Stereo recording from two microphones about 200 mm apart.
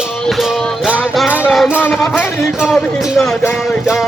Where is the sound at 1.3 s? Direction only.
5° right (ahead or behind).